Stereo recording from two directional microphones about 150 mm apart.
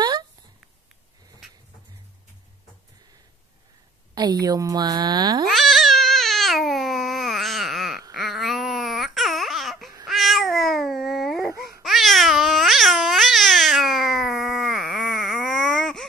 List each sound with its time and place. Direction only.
4.1 s a woman's voice: 25° right (ahead or behind)
5.5 s babbling: centre (ahead or behind)
8.1 s baby cry: centre (ahead or behind)
10.0 s cat: centre (ahead or behind)
11.8 s baby cry: centre (ahead or behind)